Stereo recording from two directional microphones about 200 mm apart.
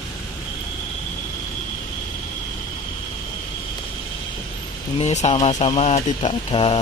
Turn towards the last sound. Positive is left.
turn(degrees=30)  # may be behind; listen again after turning